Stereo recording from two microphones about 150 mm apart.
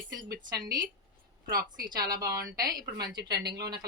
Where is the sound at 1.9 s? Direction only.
25° right (ahead or behind).